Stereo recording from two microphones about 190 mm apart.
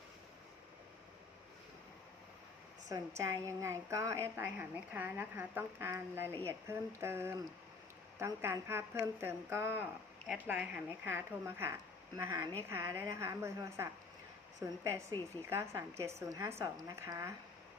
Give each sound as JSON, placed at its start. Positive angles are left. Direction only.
{"t": 3.4, "sound": "a woman's voice", "side_deg": -15}